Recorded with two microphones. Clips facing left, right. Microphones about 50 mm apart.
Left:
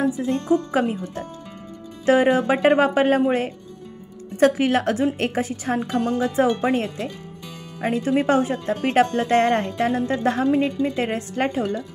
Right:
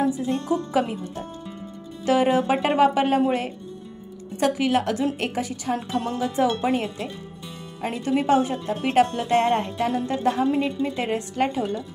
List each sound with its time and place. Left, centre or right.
0.2 s speech: left
2.0 s speech: left
4.4 s speech: left